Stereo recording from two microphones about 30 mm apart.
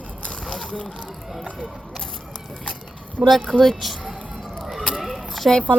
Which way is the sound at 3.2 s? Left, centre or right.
Right.